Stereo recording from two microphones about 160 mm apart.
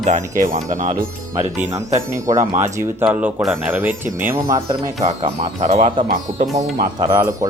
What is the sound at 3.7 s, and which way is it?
Speech, 10° right (ahead or behind).